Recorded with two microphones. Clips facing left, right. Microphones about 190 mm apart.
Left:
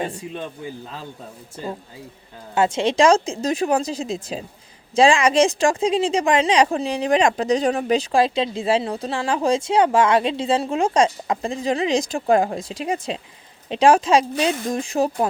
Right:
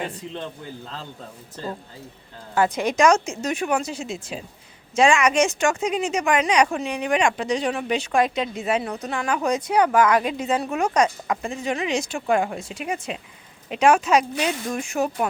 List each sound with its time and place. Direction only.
0.1 s speech: 10° left (ahead or behind)
2.6 s speech: 25° left (ahead or behind)